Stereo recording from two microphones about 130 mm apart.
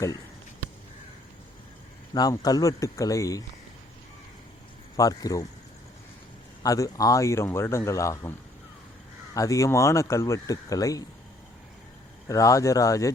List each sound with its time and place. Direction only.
2.1 s speech: 30° left (ahead or behind)
4.9 s speech: 30° left (ahead or behind)
6.6 s speech: 25° left (ahead or behind)
9.3 s speech: 25° left (ahead or behind)
12.3 s speech: 25° left (ahead or behind)